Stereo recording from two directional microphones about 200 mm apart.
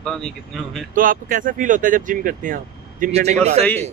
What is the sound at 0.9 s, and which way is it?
Speech, 45° right (ahead or behind).